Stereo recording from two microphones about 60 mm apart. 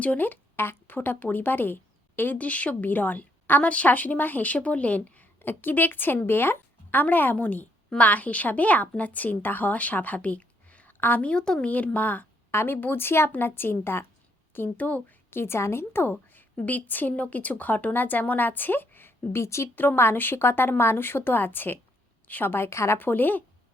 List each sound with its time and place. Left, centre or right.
0.0 s a woman's voice: left
11.3 s a woman's voice: centre
11.7 s speech: left
12.5 s speech: left
15.4 s speech: left
19.7 s a woman's voice: left
23.0 s speech: left